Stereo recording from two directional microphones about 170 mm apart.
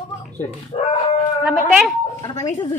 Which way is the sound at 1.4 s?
Centre (ahead or behind).